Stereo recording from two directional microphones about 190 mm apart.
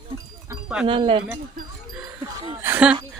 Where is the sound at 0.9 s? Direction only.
25° right (ahead or behind).